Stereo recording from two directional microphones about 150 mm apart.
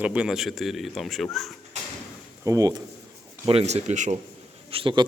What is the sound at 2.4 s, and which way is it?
Speech, 25° right (ahead or behind).